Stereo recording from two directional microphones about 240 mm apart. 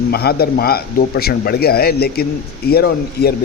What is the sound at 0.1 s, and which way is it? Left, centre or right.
A man's voice, left.